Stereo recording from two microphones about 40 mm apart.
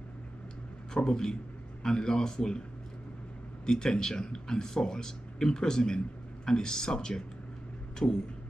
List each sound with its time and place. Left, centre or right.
0.9 s speech: centre
3.6 s speech: centre
8.0 s vehicle: left